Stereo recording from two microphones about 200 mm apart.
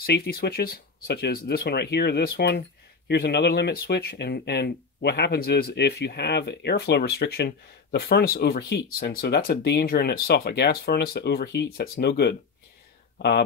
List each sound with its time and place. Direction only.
0.0 s speech: 50° left (ahead or behind)